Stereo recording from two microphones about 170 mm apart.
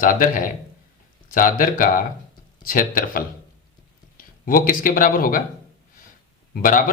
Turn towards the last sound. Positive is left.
turn(degrees=55)  # may be behind; listen again after turning